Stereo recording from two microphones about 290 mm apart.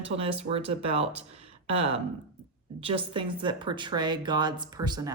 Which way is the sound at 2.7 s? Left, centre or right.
Centre.